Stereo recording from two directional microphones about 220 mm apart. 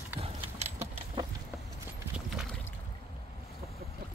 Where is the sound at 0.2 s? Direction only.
25° right (ahead or behind).